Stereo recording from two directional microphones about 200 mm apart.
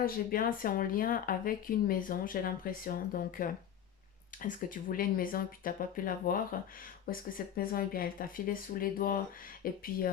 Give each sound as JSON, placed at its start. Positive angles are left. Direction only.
{"t": 0.0, "sound": "speech", "side_deg": 45}